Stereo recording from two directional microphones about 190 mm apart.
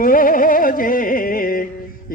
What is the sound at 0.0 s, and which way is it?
Music, 45° left (ahead or behind).